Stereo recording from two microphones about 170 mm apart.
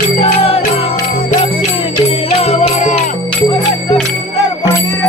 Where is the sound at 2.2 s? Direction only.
40° left (ahead or behind).